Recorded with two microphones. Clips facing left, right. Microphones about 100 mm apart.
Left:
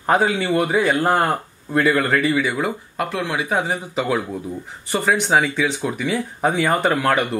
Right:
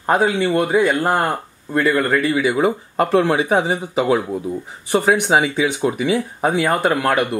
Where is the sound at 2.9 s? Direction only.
40° right (ahead or behind).